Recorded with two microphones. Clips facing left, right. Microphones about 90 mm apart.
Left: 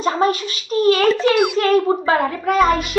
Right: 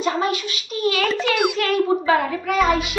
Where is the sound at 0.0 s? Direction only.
40° left (ahead or behind).